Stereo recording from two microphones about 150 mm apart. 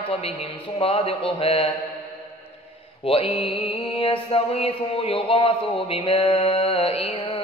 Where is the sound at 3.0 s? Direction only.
40° left (ahead or behind).